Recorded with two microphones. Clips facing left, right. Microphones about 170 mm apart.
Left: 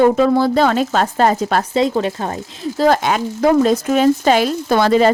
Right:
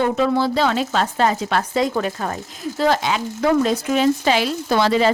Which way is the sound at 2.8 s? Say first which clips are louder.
Left 4 dB; 50° left (ahead or behind).